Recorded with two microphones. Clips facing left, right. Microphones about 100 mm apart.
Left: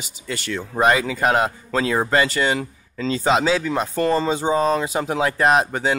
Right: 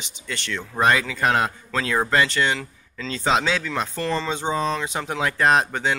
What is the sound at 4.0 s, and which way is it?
Speech, 45° left (ahead or behind).